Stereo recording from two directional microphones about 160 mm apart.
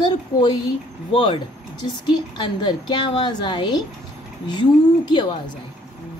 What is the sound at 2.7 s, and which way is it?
Speech, 25° left (ahead or behind).